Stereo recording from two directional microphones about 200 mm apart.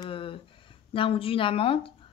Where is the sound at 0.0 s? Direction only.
25° left (ahead or behind).